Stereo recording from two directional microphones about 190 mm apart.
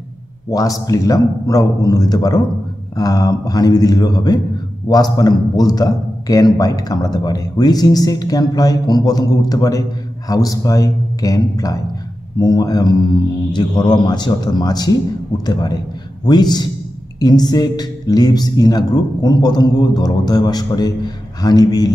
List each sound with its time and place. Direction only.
0.5 s a man's voice: 20° left (ahead or behind)